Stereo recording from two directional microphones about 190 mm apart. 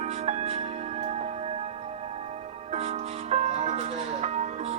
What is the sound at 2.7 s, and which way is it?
Music, 35° right (ahead or behind).